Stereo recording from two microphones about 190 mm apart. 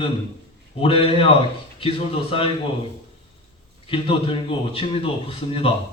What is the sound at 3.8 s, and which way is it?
A man's voice, 30° left (ahead or behind).